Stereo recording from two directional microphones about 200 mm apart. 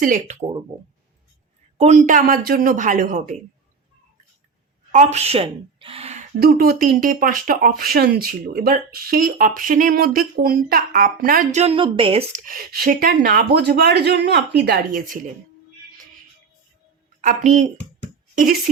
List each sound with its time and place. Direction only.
0.0 s speech: 40° right (ahead or behind)
1.8 s speech: 35° right (ahead or behind)
4.9 s a woman's voice: 35° right (ahead or behind)
6.4 s speech: 50° right (ahead or behind); by 12.4 s 30° right (ahead or behind)
12.4 s speech: 45° right (ahead or behind)
17.2 s speech: 40° right (ahead or behind)